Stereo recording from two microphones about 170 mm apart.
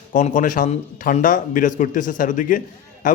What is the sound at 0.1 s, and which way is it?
Speech, 50° left (ahead or behind).